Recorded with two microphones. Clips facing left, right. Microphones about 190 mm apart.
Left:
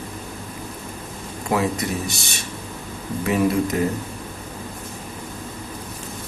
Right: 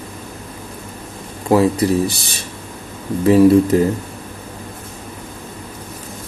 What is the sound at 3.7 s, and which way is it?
Speech, 30° right (ahead or behind).